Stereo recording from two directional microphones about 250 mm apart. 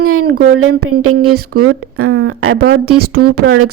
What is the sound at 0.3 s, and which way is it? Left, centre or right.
Speech, right.